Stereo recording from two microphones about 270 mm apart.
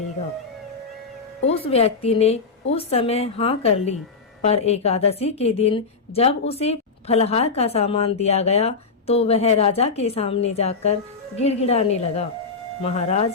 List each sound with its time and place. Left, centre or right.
1.6 s a woman's voice: left